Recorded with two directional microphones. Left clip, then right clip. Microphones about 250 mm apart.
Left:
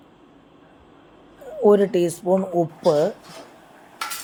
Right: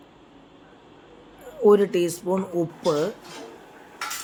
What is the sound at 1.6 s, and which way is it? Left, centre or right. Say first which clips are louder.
Speech: left 1 dB; centre.